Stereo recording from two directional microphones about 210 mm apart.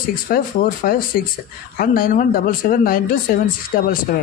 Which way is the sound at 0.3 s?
45° left (ahead or behind).